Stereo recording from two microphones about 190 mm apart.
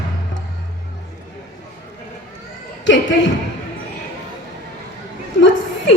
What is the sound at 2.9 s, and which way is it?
Speech, 75° left (ahead or behind).